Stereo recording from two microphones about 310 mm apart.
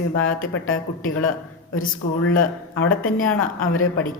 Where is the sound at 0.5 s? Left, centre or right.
Left.